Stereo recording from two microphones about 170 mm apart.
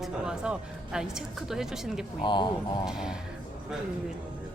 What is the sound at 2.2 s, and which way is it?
Speech, 25° left (ahead or behind).